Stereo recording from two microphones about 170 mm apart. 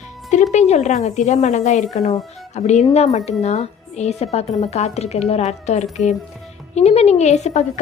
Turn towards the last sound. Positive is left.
turn(degrees=40)  # may be behind; listen again after turning